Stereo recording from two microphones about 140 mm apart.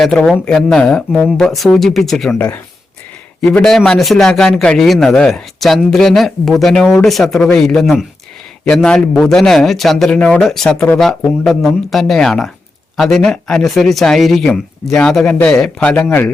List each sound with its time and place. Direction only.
0.0 s a man's voice: 5° left (ahead or behind)